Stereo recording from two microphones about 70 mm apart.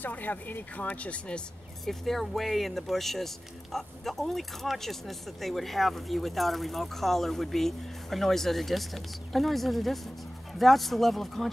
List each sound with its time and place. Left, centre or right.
0.0 s speech: left
1.9 s speech: centre